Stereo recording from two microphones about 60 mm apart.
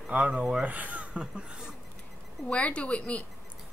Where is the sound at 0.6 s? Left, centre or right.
Right.